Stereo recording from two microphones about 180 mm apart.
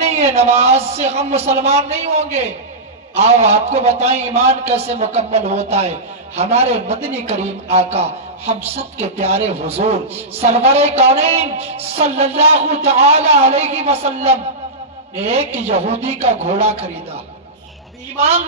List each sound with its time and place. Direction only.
0.0 s a man's voice: 35° right (ahead or behind)